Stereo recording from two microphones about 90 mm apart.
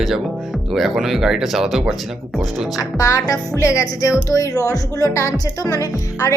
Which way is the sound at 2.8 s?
40° left (ahead or behind).